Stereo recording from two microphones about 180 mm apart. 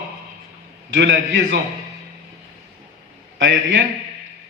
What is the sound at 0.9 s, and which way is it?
Speech, 80° right.